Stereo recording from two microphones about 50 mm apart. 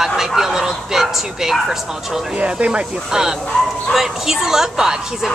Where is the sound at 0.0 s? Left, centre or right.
Centre.